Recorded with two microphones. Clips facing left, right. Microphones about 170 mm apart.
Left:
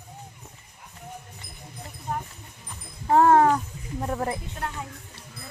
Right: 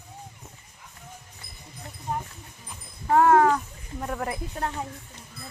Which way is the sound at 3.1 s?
30° left (ahead or behind).